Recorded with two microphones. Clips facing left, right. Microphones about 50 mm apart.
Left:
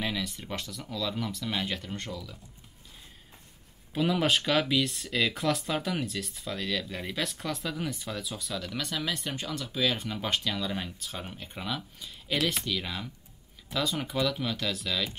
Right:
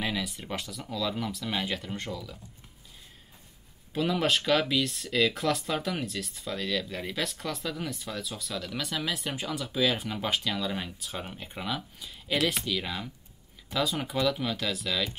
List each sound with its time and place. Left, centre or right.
0.0 s speech: centre
3.9 s speech: centre